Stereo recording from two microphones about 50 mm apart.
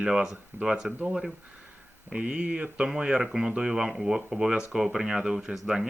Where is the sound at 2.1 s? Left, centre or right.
Right.